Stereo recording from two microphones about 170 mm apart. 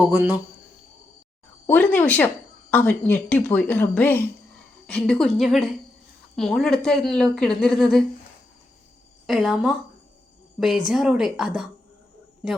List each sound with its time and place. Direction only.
0.0 s speech: 10° right (ahead or behind)
1.6 s a woman's voice: 10° left (ahead or behind)
9.2 s a woman's voice: centre (ahead or behind)